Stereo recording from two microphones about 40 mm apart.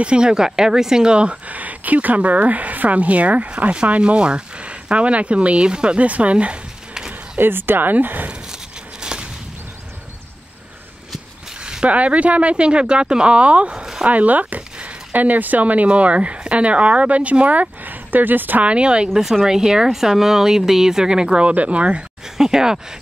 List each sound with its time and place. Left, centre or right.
0.0 s speech: right
6.0 s speech: right
7.3 s speech: right
9.0 s a sound: right
11.8 s speech: right
18.6 s speech: right
19.4 s speech: centre
21.5 s speech: right
22.4 s speech: centre